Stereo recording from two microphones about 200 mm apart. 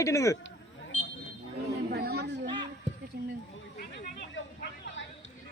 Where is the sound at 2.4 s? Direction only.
25° right (ahead or behind).